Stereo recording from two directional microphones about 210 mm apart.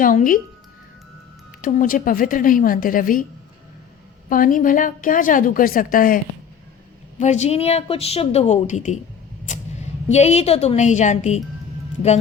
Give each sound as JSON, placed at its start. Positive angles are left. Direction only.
{"t": 0.0, "sound": "a woman's voice", "side_deg": 40}
{"t": 1.6, "sound": "a woman's voice", "side_deg": 40}
{"t": 4.3, "sound": "a woman's voice", "side_deg": 40}
{"t": 7.2, "sound": "a woman's voice", "side_deg": 35}
{"t": 10.1, "sound": "a woman's voice", "side_deg": 30}